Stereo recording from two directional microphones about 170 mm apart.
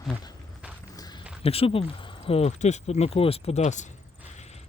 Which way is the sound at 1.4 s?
35° left (ahead or behind).